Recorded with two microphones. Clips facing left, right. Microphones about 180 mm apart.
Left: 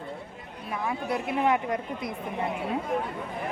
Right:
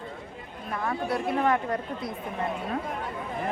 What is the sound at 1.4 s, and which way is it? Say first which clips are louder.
Speech: left 2 dB; 15° left (ahead or behind).